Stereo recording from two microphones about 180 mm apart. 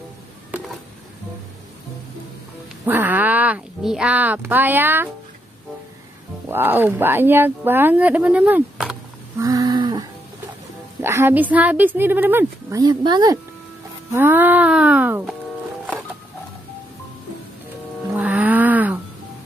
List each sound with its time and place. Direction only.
2.8 s speech: 10° right (ahead or behind)
6.5 s speech: 10° right (ahead or behind)
9.4 s livestock: 20° right (ahead or behind)
11.0 s speech: 15° right (ahead or behind)
14.1 s speech: 10° right (ahead or behind)
18.1 s music: 10° right (ahead or behind)